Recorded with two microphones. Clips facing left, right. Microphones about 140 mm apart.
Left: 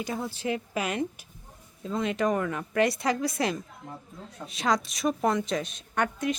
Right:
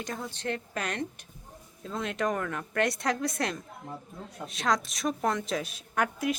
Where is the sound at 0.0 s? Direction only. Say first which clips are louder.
Left 4 dB; 5° left (ahead or behind).